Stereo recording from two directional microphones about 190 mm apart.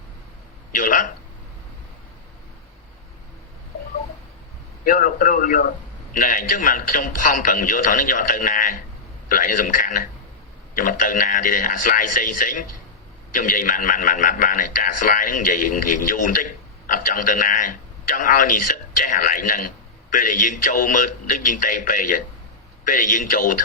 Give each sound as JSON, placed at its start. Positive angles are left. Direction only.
{"t": 0.7, "sound": "a man's voice", "side_deg": 45}
{"t": 4.9, "sound": "a man's voice", "side_deg": 45}